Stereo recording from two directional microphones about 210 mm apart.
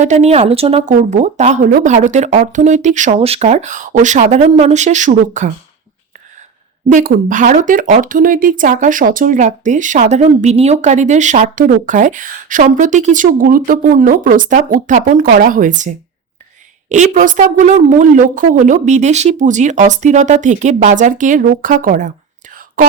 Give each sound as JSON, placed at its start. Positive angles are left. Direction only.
{"t": 0.0, "sound": "speech", "side_deg": -30}
{"t": 6.8, "sound": "speech", "side_deg": -40}
{"t": 22.5, "sound": "whispering", "side_deg": -40}